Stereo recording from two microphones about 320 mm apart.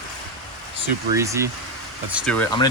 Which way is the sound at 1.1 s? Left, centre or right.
Centre.